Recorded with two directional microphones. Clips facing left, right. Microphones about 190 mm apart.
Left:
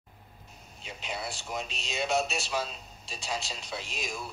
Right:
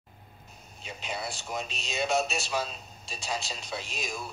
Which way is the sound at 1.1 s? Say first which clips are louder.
Right 1 dB; 45° right (ahead or behind).